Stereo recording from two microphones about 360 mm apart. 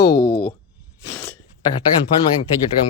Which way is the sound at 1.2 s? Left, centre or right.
Centre.